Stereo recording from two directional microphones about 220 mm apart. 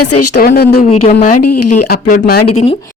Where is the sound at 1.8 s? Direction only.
45° left (ahead or behind).